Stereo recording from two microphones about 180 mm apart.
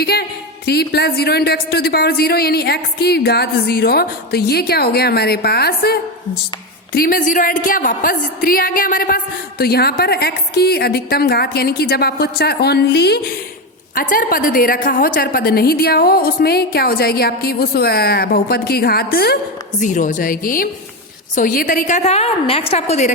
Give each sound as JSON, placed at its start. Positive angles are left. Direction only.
{"t": 0.0, "sound": "a woman's voice", "side_deg": 65}
{"t": 13.9, "sound": "a woman's voice", "side_deg": 50}
{"t": 19.8, "sound": "a woman's voice", "side_deg": 45}